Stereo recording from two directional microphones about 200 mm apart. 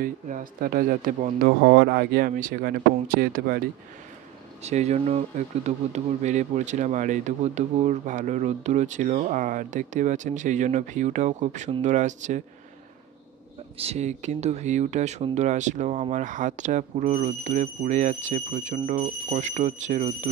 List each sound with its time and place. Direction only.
0.0 s a man's voice: 45° right (ahead or behind)
4.6 s speech: 35° right (ahead or behind)
13.7 s speech: 30° right (ahead or behind)